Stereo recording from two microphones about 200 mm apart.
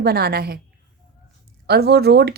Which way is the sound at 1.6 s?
55° right (ahead or behind).